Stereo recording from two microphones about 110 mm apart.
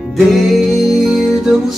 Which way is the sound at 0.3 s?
Centre (ahead or behind).